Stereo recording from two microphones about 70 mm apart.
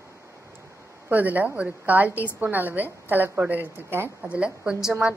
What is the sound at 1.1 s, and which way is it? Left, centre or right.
A woman's voice, right.